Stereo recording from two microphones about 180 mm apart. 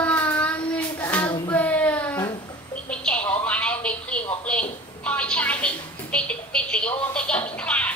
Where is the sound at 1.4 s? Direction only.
10° left (ahead or behind).